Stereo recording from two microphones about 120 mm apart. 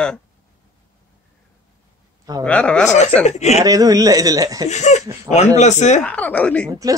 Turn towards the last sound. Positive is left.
turn(degrees=10)  # may be behind; listen again after turning